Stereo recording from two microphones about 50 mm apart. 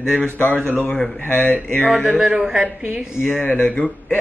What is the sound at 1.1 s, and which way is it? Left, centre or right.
Speech, left.